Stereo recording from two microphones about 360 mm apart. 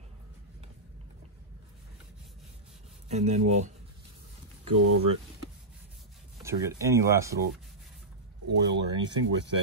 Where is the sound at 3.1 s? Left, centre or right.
Centre.